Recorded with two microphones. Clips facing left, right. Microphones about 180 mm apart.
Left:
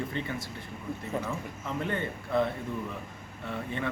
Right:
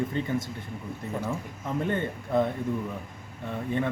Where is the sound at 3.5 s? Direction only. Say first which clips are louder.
Right 5 dB; 15° right (ahead or behind).